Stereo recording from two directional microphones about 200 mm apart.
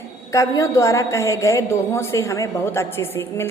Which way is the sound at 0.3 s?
15° left (ahead or behind).